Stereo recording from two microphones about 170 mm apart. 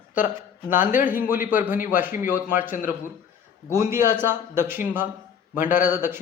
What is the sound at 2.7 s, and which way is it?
Speech, 50° left (ahead or behind).